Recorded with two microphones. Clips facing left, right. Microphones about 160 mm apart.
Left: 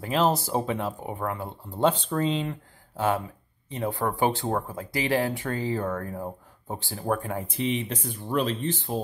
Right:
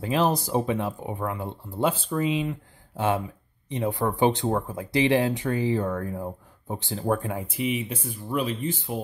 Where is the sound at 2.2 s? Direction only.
10° right (ahead or behind).